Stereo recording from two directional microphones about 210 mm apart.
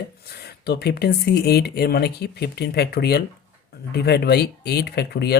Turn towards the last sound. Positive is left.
turn(degrees=50)  # may be behind; listen again after turning